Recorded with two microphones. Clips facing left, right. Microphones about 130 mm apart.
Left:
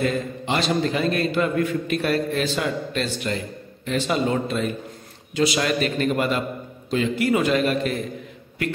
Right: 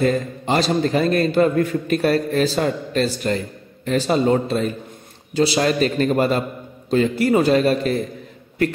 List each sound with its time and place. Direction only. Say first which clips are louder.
0.0 s a man's voice: right 4 dB; 40° right (ahead or behind)